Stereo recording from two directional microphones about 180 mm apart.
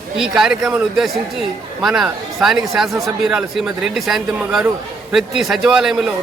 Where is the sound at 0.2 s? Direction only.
Centre (ahead or behind).